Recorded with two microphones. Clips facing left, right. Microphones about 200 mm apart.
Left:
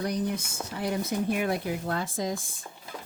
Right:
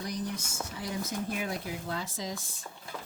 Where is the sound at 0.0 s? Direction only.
60° left (ahead or behind).